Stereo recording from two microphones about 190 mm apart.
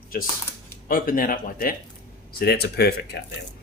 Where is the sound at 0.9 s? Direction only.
50° left (ahead or behind).